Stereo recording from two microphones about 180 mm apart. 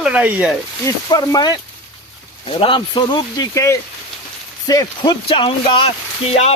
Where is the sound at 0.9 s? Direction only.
20° left (ahead or behind).